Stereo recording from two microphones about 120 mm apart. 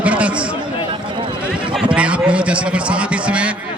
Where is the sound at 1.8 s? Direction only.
10° right (ahead or behind).